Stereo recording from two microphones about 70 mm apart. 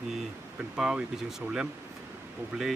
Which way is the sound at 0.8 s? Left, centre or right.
Centre.